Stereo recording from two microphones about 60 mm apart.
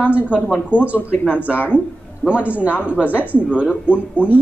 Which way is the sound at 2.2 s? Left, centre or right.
Right.